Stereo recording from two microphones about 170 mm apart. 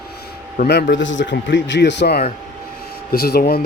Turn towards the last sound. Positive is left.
turn(degrees=65)  # may be behind; listen again after turning